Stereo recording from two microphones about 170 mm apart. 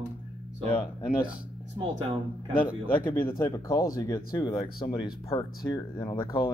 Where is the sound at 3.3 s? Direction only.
20° left (ahead or behind).